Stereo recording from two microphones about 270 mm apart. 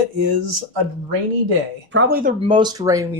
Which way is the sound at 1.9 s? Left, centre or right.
Right.